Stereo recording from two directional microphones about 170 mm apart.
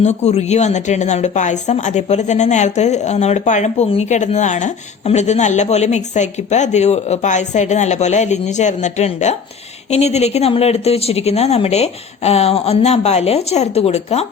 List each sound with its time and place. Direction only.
0.0 s speech: 40° left (ahead or behind)